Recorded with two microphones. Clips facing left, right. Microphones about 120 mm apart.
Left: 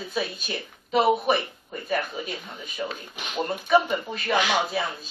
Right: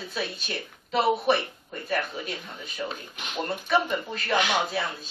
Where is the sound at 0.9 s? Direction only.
15° left (ahead or behind).